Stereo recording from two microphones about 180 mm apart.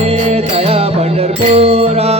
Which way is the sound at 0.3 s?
35° right (ahead or behind).